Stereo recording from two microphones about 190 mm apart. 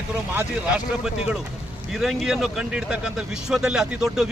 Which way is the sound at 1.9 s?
Centre (ahead or behind).